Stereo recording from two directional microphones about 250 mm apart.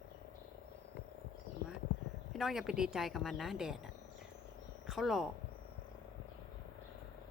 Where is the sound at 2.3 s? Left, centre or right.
Centre.